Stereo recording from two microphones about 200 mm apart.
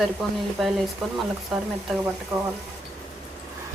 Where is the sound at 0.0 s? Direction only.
Centre (ahead or behind).